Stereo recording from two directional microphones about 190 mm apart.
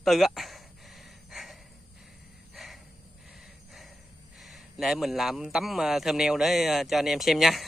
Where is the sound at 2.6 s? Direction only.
Centre (ahead or behind).